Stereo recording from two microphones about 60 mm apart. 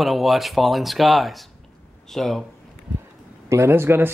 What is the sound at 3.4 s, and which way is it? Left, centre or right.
Speech, right.